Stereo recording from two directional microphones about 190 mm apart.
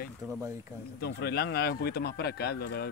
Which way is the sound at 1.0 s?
55° left (ahead or behind).